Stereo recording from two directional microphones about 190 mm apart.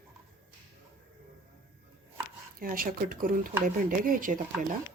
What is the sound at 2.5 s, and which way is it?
Speech, 50° right (ahead or behind).